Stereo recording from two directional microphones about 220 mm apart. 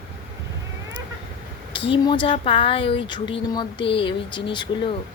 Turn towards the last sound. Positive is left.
turn(degrees=20)  # may be behind; listen again after turning